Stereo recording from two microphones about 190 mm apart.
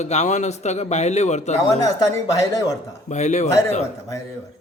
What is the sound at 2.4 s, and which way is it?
Speech, 15° left (ahead or behind).